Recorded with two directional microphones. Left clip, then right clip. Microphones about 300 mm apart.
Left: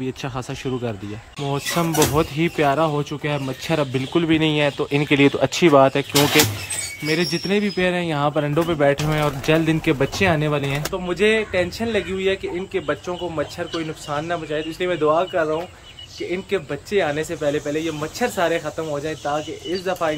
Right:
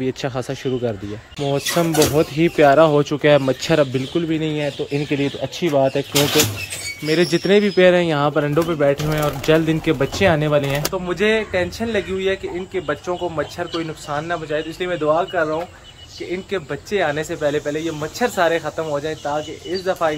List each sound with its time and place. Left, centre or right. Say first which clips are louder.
0.0 s speech: right 5 dB; centre
13.4 s speech: right 2 dB; centre